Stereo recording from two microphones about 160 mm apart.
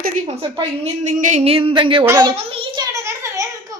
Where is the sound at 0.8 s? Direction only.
50° right (ahead or behind); by 2.0 s 30° right (ahead or behind).